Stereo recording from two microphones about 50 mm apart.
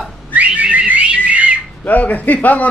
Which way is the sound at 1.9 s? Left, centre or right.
Left.